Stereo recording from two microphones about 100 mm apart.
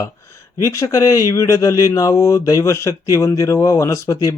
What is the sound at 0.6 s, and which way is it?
Speech, 30° left (ahead or behind).